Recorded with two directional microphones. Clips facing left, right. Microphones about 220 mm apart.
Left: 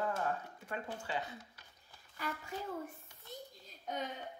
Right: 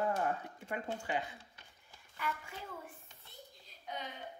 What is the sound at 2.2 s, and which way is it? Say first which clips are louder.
A woman's voice: left 1 dB; 40° left (ahead or behind).